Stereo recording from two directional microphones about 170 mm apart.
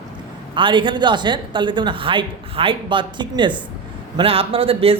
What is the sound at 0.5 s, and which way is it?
A woman's voice, 30° right (ahead or behind).